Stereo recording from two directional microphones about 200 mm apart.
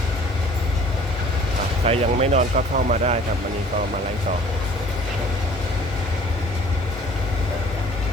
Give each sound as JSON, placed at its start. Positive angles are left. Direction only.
{"t": 1.8, "sound": "speech", "side_deg": -30}